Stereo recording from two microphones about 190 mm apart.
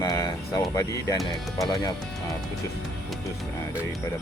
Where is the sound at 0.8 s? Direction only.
15° left (ahead or behind).